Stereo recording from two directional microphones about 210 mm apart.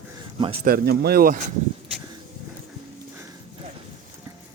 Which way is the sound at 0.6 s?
45° right (ahead or behind).